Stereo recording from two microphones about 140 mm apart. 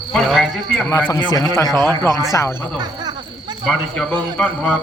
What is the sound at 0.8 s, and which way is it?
Speech, 15° left (ahead or behind).